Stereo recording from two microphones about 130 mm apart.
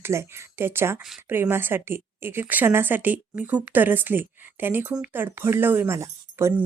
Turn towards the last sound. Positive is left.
turn(degrees=-20)  # may be behind; listen again after turning